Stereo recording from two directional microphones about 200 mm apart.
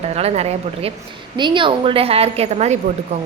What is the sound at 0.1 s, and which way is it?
A woman's voice, 30° right (ahead or behind).